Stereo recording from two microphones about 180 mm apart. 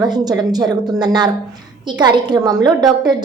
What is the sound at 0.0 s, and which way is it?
A woman's voice, 20° right (ahead or behind).